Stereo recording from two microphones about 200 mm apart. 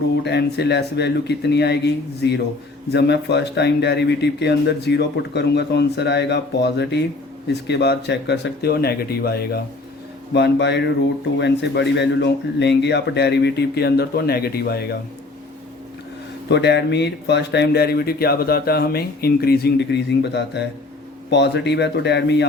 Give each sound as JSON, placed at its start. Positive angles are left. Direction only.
{"t": 0.3, "sound": "speech", "side_deg": 60}
{"t": 16.5, "sound": "speech", "side_deg": 60}